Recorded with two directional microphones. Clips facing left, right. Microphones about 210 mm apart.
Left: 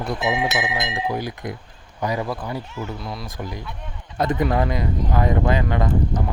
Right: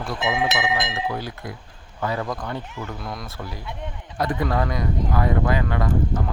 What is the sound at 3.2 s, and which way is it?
Speech, 15° left (ahead or behind).